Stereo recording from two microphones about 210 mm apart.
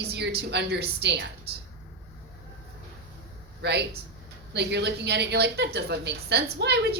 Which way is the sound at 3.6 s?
55° right (ahead or behind).